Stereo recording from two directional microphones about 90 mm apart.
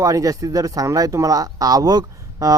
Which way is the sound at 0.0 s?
40° right (ahead or behind).